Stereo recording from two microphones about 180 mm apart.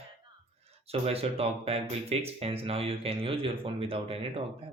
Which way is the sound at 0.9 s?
35° right (ahead or behind).